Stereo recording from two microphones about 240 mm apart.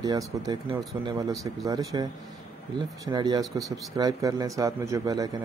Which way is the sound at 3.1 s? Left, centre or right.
Centre.